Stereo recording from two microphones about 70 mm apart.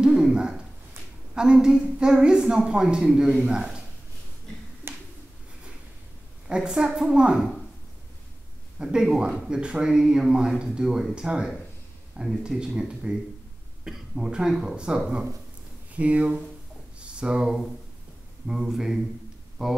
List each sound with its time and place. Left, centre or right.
0.0 s a sound: centre
1.3 s speech: centre
6.4 s a woman's voice: centre
8.7 s speech: centre